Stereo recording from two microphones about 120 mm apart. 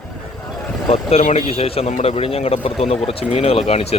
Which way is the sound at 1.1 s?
65° left (ahead or behind).